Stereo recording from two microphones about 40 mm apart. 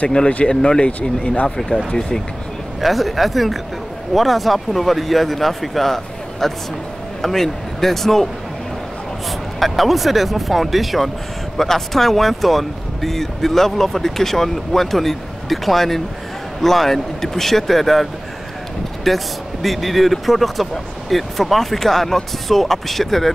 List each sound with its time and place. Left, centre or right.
0.5 s speech: left
2.8 s speech: centre
9.6 s speech: centre
19.0 s speech: centre